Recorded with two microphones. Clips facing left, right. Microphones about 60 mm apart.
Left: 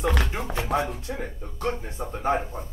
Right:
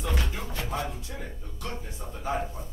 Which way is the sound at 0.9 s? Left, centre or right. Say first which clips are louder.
Left 6 dB; left.